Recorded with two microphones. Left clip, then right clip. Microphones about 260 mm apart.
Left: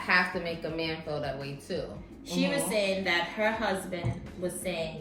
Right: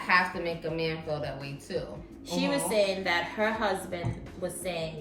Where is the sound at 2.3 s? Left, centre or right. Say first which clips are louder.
Right 1 dB; centre.